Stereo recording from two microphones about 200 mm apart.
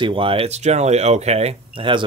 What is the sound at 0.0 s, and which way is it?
Speech, 25° right (ahead or behind).